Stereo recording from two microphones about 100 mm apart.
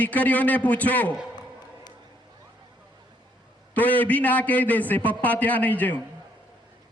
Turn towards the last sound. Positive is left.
turn(degrees=15)  # may be behind; listen again after turning